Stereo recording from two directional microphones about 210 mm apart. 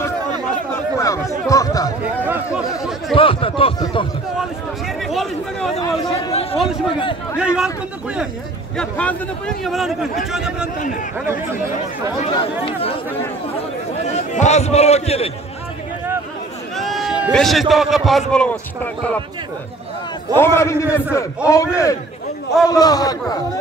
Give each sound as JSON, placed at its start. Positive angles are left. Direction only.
{"t": 0.9, "sound": "a sound", "side_deg": 15}
{"t": 2.2, "sound": "speech", "side_deg": -5}
{"t": 3.2, "sound": "speech", "side_deg": 25}
{"t": 5.0, "sound": "a man's voice", "side_deg": 0}
{"t": 5.8, "sound": "a man's voice", "side_deg": 15}
{"t": 7.3, "sound": "a man's voice", "side_deg": -5}
{"t": 14.0, "sound": "a man's voice", "side_deg": 35}
{"t": 16.7, "sound": "a sound", "side_deg": 0}
{"t": 17.3, "sound": "a man's voice", "side_deg": 0}
{"t": 20.3, "sound": "a man's voice", "side_deg": 10}